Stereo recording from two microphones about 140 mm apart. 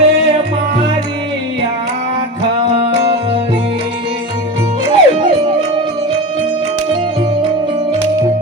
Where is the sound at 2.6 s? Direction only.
40° right (ahead or behind).